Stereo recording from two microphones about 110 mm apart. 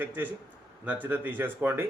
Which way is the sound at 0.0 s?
15° right (ahead or behind).